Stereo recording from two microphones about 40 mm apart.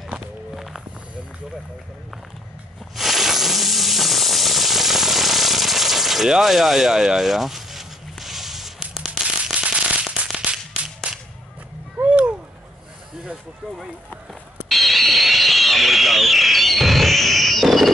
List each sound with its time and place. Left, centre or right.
3.0 s hiss: centre
9.4 s fireworks: right
10.5 s whip: right
14.7 s a sound: centre